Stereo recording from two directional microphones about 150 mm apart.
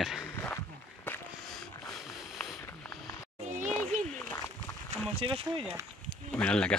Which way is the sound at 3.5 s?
55° right (ahead or behind).